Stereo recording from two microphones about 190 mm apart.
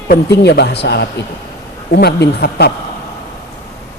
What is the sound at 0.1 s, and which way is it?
Speech, 60° left (ahead or behind).